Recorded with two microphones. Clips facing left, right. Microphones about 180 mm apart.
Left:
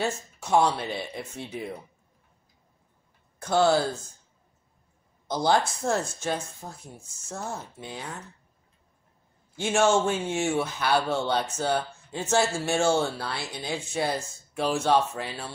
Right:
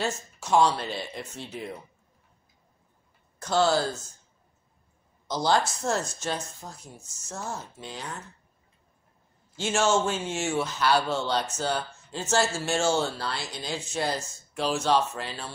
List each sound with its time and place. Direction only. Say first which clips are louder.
0.0 s speech: left 1 dB; 55° left (ahead or behind)
3.3 s speech: left 2 dB; 55° left (ahead or behind)
5.3 s speech: left 1 dB; 55° left (ahead or behind)
9.6 s speech: left 2 dB; 55° left (ahead or behind)